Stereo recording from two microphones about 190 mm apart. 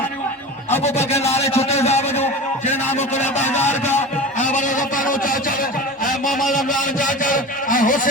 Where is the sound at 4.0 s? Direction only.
40° left (ahead or behind).